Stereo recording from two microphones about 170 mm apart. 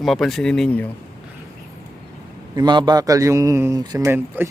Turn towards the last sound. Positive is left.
turn(degrees=-15)  # may be behind; listen again after turning